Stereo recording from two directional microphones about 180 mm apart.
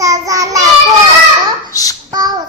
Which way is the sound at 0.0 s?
20° right (ahead or behind).